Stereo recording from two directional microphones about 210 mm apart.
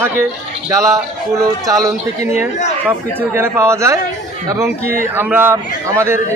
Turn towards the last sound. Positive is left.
turn(degrees=-10)  # may be behind; listen again after turning